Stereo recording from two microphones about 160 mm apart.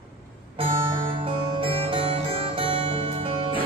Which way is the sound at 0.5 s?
35° right (ahead or behind).